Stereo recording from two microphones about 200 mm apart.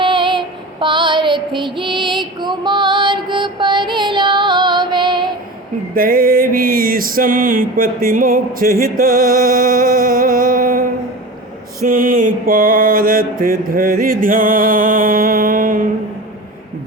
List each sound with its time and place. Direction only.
0.0 s child singing: 25° right (ahead or behind)
5.9 s a sound: 45° right (ahead or behind)
11.8 s mantra: 45° right (ahead or behind)